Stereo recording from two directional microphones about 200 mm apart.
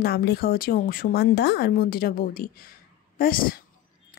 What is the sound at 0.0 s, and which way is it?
Speech, 55° left (ahead or behind).